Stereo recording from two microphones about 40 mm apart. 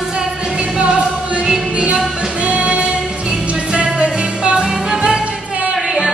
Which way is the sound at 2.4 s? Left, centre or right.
Right.